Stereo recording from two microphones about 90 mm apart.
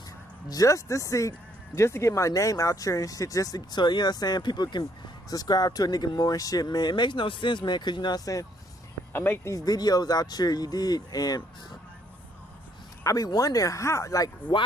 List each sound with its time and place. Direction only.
0.5 s speech: 40° left (ahead or behind)
3.7 s speech: 55° left (ahead or behind)
9.1 s speech: 25° left (ahead or behind)
9.7 s speech: 45° left (ahead or behind)
13.0 s speech: 40° left (ahead or behind)